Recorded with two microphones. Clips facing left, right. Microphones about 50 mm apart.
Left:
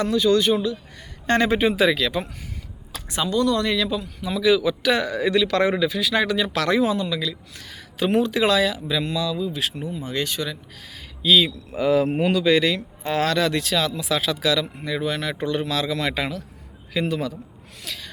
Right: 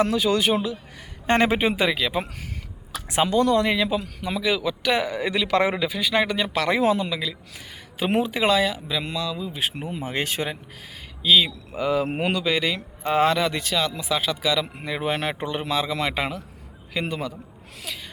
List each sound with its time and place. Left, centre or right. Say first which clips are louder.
0.0 s speech: left 2 dB; right
1.6 s speech: left 3 dB; centre
3.1 s speech: right 2 dB; right
4.4 s speech: left 6 dB; centre
6.8 s speech: right 1 dB; right
10.0 s speech: even; right
11.2 s speech: left 1 dB; centre
12.0 s speech: left 4 dB; right
12.3 s speech: left 5 dB; centre
13.5 s speech: left 2 dB; centre
14.8 s speech: even; right
15.4 s speech: left 1 dB; centre
16.9 s speech: left 3 dB; centre